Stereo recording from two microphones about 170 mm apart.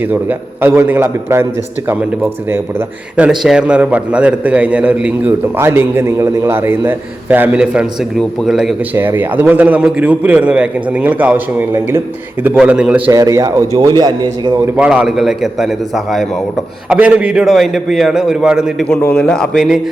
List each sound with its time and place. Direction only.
0.0 s a man's voice: 10° right (ahead or behind)
2.5 s a man's voice: 10° right (ahead or behind)
9.0 s a man's voice: 10° right (ahead or behind)
13.1 s a man's voice: 20° right (ahead or behind)
14.8 s a man's voice: 5° right (ahead or behind)